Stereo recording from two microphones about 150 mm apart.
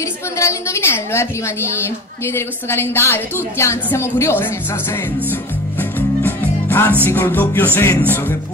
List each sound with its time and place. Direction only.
0.4 s a woman's voice: 20° left (ahead or behind)
5.8 s music: 15° left (ahead or behind)
7.1 s a woman's voice: 15° left (ahead or behind)